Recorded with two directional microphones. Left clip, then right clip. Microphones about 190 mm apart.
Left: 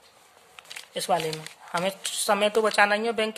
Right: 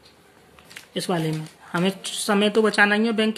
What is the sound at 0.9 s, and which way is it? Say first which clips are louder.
A woman's voice: even; 20° left (ahead or behind).